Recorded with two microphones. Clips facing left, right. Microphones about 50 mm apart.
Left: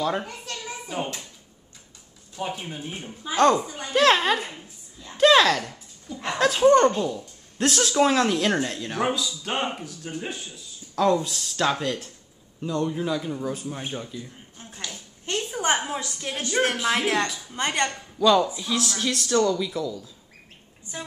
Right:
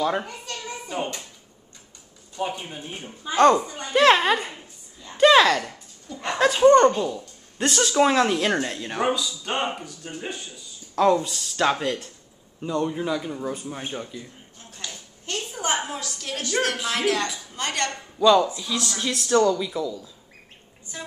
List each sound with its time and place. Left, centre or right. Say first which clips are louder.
0.0 s a child's voice: right 2 dB; centre
2.3 s speech: right 2 dB; centre
3.9 s speech: right 2 dB; centre
4.4 s a sound: right 1 dB; centre
5.2 s a sound: right 2 dB; centre
5.5 s speech: right 1 dB; centre
8.1 s speech: right 1 dB; right
8.5 s speech: even; centre
11.1 s speech: right 1 dB; centre
15.5 s a sound: left 2 dB; left
15.9 s speech: left 1 dB; left
18.2 s speech: right 2 dB; centre
19.0 s speech: right 3 dB; centre
20.9 s speech: left 1 dB; centre